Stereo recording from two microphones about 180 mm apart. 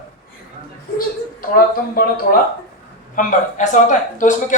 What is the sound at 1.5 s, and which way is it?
Speech, 50° left (ahead or behind).